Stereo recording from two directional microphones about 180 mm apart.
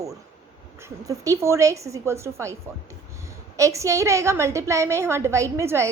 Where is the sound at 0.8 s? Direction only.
15° right (ahead or behind).